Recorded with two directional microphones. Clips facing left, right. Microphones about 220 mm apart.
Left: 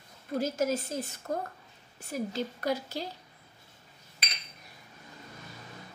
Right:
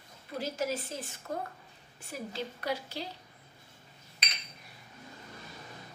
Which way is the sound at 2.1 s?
45° left (ahead or behind).